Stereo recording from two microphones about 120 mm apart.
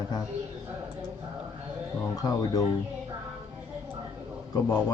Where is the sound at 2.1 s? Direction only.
30° left (ahead or behind).